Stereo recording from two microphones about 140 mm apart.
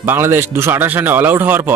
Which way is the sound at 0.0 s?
15° right (ahead or behind).